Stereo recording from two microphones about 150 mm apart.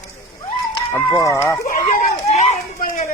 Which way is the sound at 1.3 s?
15° left (ahead or behind).